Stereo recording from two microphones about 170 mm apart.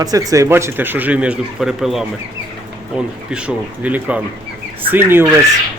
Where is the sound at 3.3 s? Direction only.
5° right (ahead or behind).